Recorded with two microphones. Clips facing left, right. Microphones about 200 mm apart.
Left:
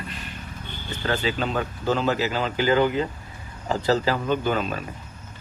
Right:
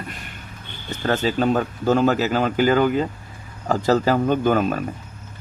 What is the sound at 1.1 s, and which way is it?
Speech, 45° right (ahead or behind).